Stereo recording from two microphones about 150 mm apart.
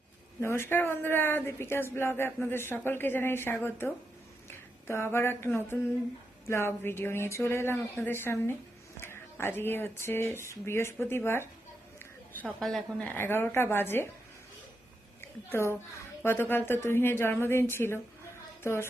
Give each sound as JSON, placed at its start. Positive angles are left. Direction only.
{"t": 0.4, "sound": "speech", "side_deg": 15}
{"t": 4.4, "sound": "a sound", "side_deg": 15}
{"t": 6.5, "sound": "speech", "side_deg": 15}
{"t": 12.4, "sound": "speech", "side_deg": 5}
{"t": 15.2, "sound": "a woman's voice", "side_deg": 15}